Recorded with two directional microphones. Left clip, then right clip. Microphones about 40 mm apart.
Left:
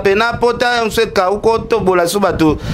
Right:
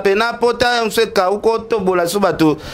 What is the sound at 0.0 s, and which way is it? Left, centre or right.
A man's voice, right.